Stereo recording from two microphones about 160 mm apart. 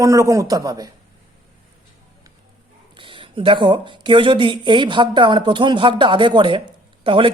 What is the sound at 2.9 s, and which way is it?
Speech, 30° right (ahead or behind).